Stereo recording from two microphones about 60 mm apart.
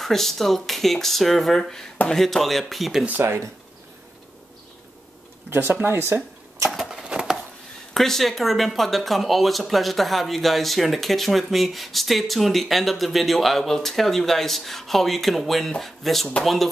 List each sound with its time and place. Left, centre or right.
0.0 s speech: centre
3.1 s speech: right
5.5 s speech: right
6.7 s a sound: centre
7.9 s speech: centre